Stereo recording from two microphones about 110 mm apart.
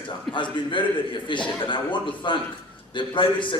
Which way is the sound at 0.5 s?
45° left (ahead or behind).